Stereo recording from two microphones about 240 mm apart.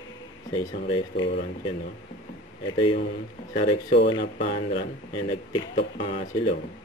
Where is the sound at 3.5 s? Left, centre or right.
Left.